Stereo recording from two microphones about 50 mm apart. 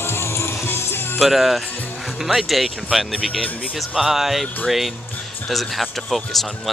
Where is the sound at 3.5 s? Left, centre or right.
Left.